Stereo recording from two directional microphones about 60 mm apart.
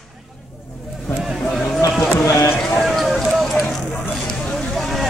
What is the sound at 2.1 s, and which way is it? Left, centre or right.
Run, left.